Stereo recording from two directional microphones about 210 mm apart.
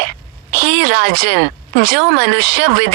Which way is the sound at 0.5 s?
50° right (ahead or behind).